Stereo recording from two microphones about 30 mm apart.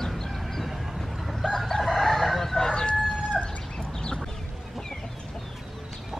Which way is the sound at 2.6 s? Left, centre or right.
Left.